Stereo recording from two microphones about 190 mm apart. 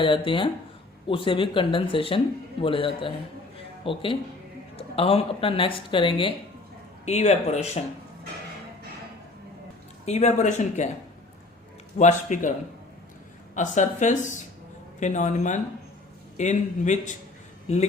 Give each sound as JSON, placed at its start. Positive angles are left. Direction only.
{"t": 0.0, "sound": "speech", "side_deg": 25}
{"t": 10.1, "sound": "speech", "side_deg": 35}
{"t": 11.9, "sound": "speech", "side_deg": 40}
{"t": 13.6, "sound": "speech", "side_deg": 40}